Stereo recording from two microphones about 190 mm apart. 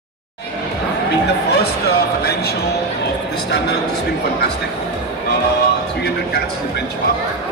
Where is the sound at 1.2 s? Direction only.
60° left (ahead or behind).